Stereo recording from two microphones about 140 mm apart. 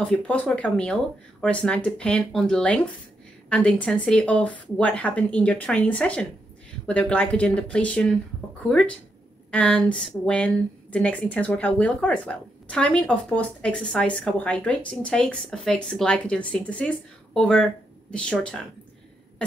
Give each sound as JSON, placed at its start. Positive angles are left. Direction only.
{"t": 0.0, "sound": "a woman's voice", "side_deg": 10}